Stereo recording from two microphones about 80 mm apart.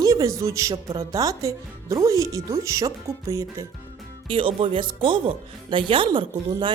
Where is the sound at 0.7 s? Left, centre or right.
Right.